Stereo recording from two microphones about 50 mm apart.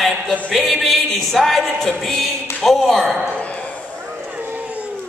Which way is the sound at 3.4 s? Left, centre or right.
Left.